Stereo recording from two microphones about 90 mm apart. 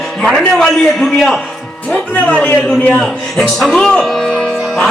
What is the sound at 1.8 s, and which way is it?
Music, 15° left (ahead or behind).